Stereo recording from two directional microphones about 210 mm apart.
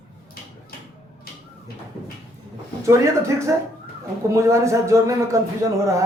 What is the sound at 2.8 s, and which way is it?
Speech, 15° right (ahead or behind).